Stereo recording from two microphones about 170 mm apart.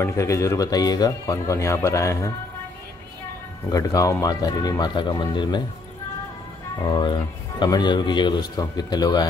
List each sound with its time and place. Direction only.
0.0 s speech: 15° left (ahead or behind)
3.7 s speech: 20° left (ahead or behind)
6.8 s speech: 25° left (ahead or behind)